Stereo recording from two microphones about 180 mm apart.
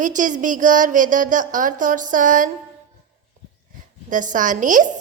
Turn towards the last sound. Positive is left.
turn(degrees=-45)  # may be behind; listen again after turning